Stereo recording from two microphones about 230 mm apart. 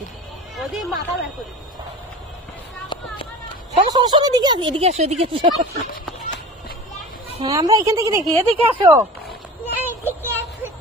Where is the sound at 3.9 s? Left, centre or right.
Centre.